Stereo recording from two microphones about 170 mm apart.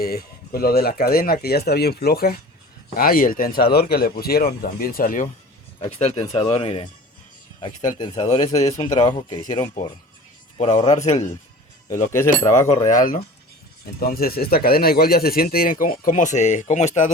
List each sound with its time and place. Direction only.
0.0 s speech: 65° left (ahead or behind)
6.0 s speech: 40° left (ahead or behind)
7.8 s speech: 25° left (ahead or behind)
10.6 s speech: 45° left (ahead or behind)
12.1 s speech: 15° left (ahead or behind)
12.6 s speech: 45° left (ahead or behind)